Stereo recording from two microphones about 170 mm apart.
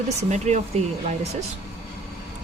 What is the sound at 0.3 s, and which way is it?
Speech, 40° right (ahead or behind).